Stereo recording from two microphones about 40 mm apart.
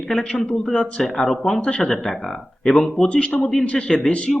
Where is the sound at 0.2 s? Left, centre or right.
Left.